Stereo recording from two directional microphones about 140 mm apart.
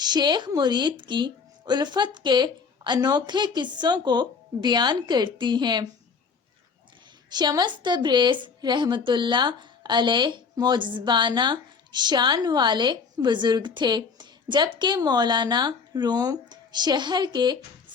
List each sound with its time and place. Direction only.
0.0 s a woman's voice: 30° right (ahead or behind)
7.3 s a woman's voice: 30° right (ahead or behind)